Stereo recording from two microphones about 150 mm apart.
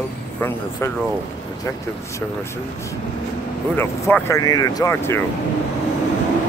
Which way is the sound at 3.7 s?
15° left (ahead or behind).